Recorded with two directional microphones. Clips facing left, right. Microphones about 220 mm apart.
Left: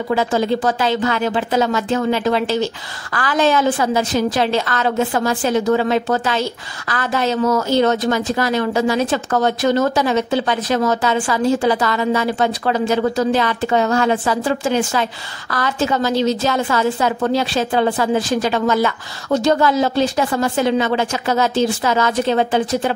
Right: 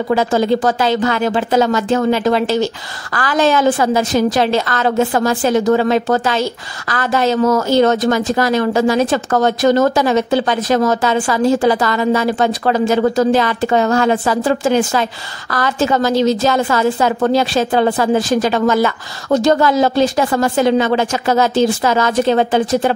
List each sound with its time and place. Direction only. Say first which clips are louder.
0.1 s a woman's voice: right 3 dB; 45° right (ahead or behind)